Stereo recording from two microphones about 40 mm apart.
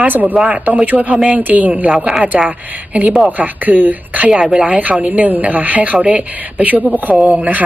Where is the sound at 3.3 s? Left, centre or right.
Right.